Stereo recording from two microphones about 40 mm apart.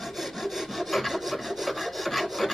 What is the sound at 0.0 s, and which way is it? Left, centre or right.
Rub, centre.